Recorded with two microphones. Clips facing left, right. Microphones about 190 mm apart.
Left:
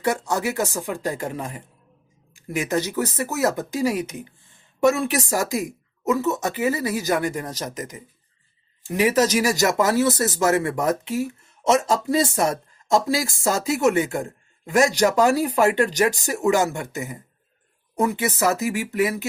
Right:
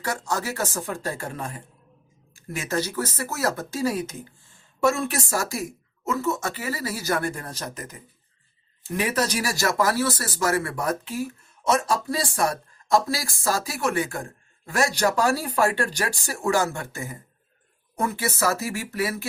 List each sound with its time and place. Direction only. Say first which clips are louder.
0.0 s speech: left 5 dB; 15° left (ahead or behind)